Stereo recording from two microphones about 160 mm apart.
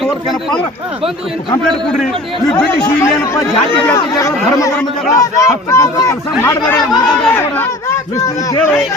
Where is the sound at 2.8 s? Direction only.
15° left (ahead or behind).